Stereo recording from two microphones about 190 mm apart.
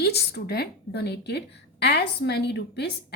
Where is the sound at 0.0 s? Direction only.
60° left (ahead or behind).